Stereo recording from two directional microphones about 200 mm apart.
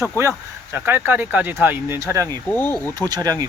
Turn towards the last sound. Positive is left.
turn(degrees=-20)  # may be behind; listen again after turning